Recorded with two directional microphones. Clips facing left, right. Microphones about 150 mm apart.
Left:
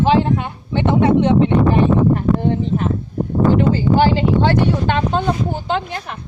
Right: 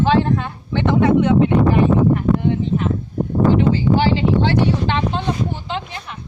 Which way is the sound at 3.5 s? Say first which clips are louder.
Left 2 dB; 45° left (ahead or behind).